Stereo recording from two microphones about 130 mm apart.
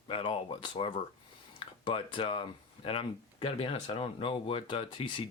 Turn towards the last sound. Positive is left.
turn(degrees=35)  # may be behind; listen again after turning